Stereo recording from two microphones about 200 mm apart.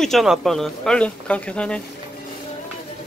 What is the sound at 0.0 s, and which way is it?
Speech, centre (ahead or behind).